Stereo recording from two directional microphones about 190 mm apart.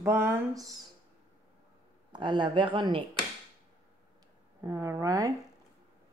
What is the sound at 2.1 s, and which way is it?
Speech, 25° right (ahead or behind).